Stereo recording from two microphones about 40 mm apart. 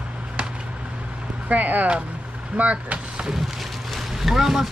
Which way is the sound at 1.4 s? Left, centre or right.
Right.